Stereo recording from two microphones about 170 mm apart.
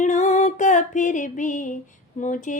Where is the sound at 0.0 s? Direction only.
45° left (ahead or behind).